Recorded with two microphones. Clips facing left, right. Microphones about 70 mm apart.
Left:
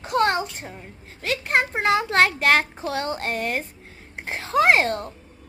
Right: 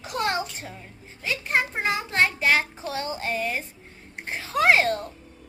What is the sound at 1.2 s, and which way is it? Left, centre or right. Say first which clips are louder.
Speech: left 3 dB; left.